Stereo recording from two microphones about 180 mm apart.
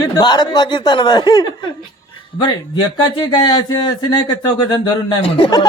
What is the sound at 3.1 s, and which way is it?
Speech, 25° left (ahead or behind).